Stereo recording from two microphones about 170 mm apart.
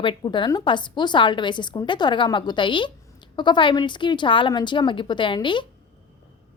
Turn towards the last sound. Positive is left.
turn(degrees=30)  # may be behind; listen again after turning